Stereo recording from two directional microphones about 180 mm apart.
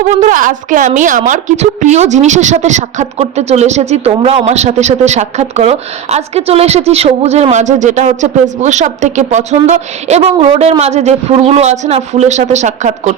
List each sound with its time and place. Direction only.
0.2 s a woman's voice: 45° right (ahead or behind)